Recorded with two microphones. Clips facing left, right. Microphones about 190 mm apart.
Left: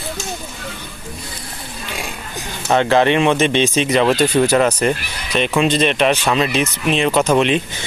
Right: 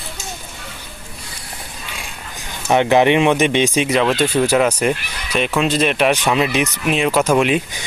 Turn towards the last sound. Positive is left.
turn(degrees=-10)  # may be behind; listen again after turning